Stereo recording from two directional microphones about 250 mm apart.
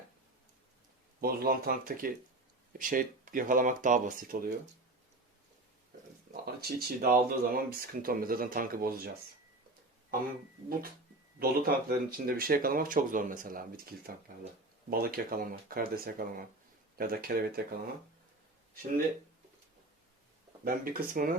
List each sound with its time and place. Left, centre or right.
1.2 s speech: right
6.3 s speech: right
11.3 s speech: right
20.7 s speech: right